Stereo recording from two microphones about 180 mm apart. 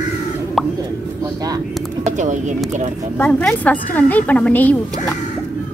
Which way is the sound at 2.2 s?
45° right (ahead or behind).